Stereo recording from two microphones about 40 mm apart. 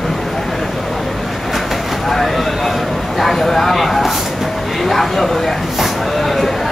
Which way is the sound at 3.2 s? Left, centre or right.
Centre.